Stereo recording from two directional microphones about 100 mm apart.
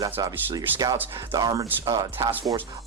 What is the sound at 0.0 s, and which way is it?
Speech, 40° right (ahead or behind).